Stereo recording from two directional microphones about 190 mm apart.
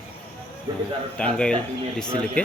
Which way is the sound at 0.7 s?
20° right (ahead or behind).